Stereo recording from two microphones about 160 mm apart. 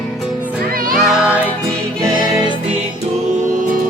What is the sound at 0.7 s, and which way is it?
Music, 65° right (ahead or behind).